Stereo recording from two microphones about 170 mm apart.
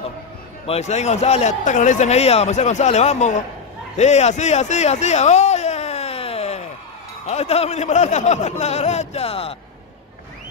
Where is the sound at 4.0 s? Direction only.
40° left (ahead or behind).